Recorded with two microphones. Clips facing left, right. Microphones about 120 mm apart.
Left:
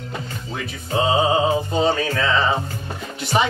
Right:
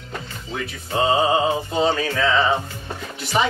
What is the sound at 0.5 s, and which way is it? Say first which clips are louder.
Music: even; centre (ahead or behind).